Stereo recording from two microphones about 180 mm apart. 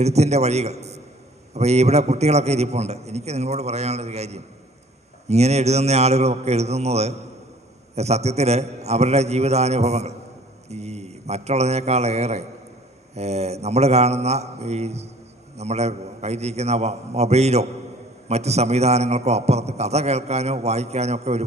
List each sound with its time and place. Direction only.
0.0 s a man's voice: 35° right (ahead or behind)